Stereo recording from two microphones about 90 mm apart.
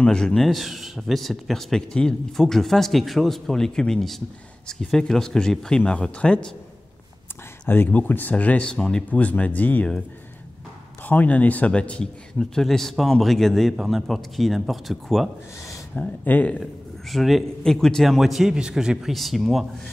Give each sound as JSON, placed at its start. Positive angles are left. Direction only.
{"t": 0.0, "sound": "speech", "side_deg": 10}
{"t": 7.6, "sound": "speech", "side_deg": 25}
{"t": 11.1, "sound": "speech", "side_deg": 20}
{"t": 15.9, "sound": "speech", "side_deg": 15}
{"t": 17.1, "sound": "speech", "side_deg": 0}